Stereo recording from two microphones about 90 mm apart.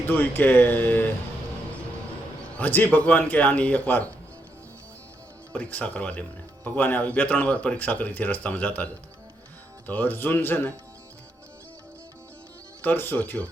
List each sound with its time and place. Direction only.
0.1 s speech: 20° left (ahead or behind)
2.6 s speech: 20° left (ahead or behind)
5.5 s speech: 15° left (ahead or behind)
12.8 s speech: 20° left (ahead or behind)